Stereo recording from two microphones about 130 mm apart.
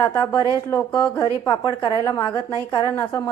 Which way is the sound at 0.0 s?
25° left (ahead or behind).